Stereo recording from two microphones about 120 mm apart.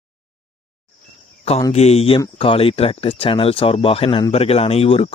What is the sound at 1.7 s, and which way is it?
Speech, 60° left (ahead or behind).